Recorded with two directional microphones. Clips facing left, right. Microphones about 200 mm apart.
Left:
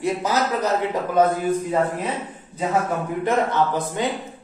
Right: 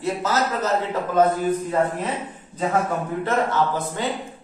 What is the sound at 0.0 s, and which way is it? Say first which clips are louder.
Speech: left 1 dB; 15° left (ahead or behind).